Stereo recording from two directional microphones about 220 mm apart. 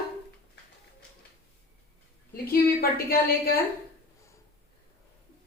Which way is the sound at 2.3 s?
40° left (ahead or behind).